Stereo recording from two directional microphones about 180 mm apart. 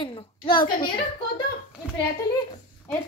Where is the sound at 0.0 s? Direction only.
25° left (ahead or behind).